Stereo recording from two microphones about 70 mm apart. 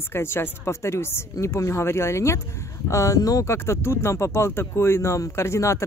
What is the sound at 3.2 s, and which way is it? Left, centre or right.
Speech, left.